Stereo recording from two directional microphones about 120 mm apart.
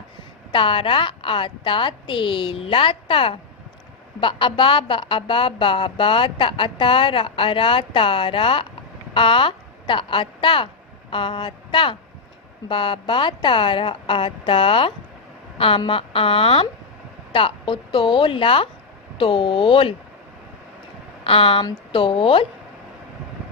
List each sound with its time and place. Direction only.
0.5 s a woman's voice: 45° left (ahead or behind)
21.2 s a woman's voice: 50° left (ahead or behind)